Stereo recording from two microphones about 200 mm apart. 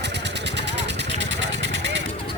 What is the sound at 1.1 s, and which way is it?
Vehicle, 65° right (ahead or behind).